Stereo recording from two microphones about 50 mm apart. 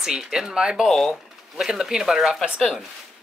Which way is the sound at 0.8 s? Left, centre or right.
Centre.